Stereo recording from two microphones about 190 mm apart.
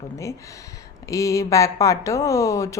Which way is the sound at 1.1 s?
15° left (ahead or behind).